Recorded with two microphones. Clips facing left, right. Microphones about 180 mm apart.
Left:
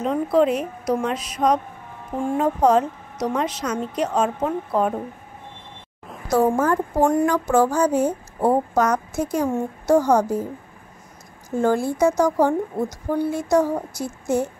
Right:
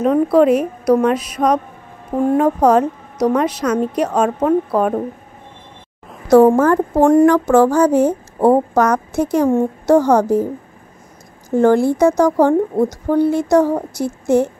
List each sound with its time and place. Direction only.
0.0 s speech: 60° right (ahead or behind)
6.3 s a woman's voice: 70° right (ahead or behind)
11.5 s a woman's voice: 65° right (ahead or behind)